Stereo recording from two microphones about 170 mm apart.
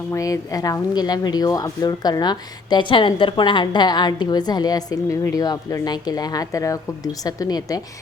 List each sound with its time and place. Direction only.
0.1 s speech: 20° left (ahead or behind)